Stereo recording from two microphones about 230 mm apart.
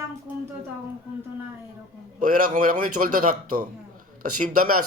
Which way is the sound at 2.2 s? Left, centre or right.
Right.